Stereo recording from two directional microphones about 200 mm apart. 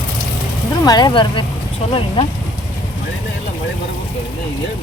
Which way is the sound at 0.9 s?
20° left (ahead or behind).